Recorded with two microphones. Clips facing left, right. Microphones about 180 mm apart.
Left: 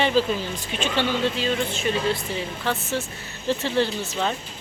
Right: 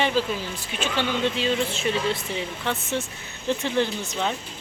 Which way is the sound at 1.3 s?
25° right (ahead or behind).